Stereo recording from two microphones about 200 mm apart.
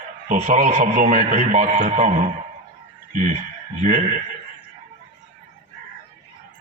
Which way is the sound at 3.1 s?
40° right (ahead or behind).